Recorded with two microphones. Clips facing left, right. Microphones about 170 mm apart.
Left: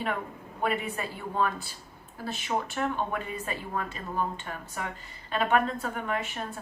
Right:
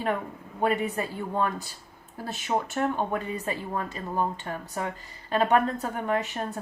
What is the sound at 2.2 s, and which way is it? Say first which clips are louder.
Speech: right 2 dB; 45° right (ahead or behind).